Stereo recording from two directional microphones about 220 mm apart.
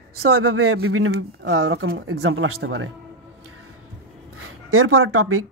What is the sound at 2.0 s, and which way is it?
Speech, 65° right (ahead or behind).